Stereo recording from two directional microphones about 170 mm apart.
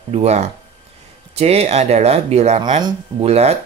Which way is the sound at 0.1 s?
40° right (ahead or behind).